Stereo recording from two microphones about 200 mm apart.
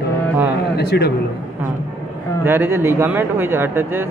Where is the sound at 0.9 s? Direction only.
55° left (ahead or behind).